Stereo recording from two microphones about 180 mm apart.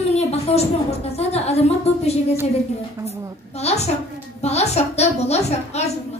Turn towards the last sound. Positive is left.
turn(degrees=35)  # may be behind; listen again after turning